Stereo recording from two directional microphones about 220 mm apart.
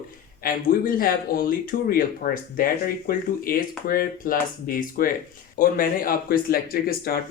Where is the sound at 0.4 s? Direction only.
40° left (ahead or behind).